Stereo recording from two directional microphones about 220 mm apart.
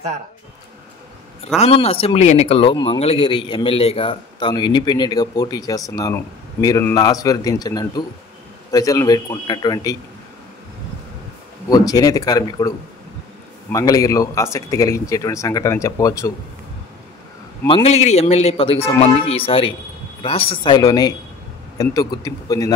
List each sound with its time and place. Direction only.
1.6 s speech: 25° left (ahead or behind)
11.7 s speech: 15° left (ahead or behind)
17.6 s speech: 25° left (ahead or behind)